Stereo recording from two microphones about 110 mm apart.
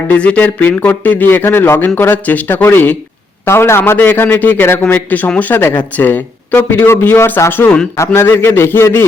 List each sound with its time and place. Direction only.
0.1 s a man's voice: 10° left (ahead or behind)